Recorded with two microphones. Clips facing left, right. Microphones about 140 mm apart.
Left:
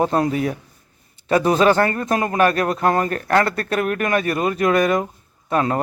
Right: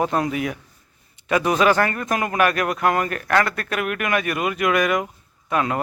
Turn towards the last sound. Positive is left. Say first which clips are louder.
# left 3 dB
turn(degrees=35)  # may be behind; listen again after turning